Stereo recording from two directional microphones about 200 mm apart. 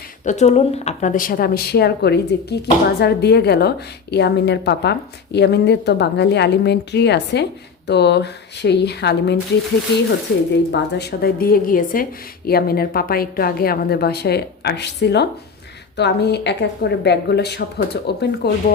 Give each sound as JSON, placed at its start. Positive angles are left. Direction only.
{"t": 0.3, "sound": "a woman's voice", "side_deg": 35}
{"t": 10.7, "sound": "a woman's voice", "side_deg": 55}